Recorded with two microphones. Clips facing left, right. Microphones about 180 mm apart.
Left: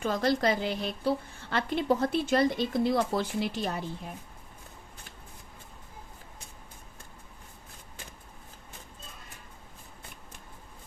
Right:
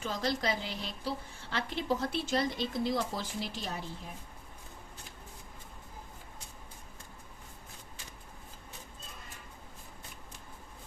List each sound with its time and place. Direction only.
0.0 s a woman's voice: 55° left (ahead or behind)